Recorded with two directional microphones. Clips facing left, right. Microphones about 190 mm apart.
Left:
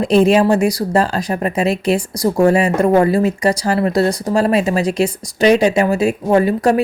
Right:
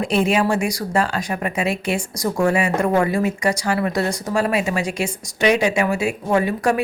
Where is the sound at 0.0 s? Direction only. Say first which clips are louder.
Left 7 dB; 35° left (ahead or behind).